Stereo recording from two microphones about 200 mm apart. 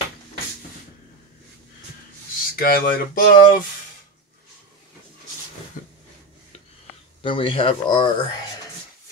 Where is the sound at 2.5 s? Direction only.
45° left (ahead or behind).